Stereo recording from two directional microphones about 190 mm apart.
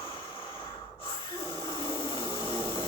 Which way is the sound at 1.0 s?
25° left (ahead or behind).